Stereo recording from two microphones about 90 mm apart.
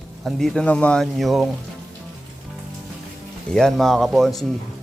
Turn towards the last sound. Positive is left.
turn(degrees=0)  # may be behind; listen again after turning